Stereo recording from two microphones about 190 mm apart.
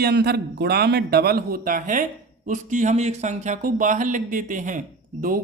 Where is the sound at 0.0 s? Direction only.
55° right (ahead or behind).